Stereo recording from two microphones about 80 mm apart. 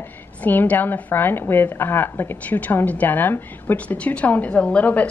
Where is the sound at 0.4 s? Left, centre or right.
Left.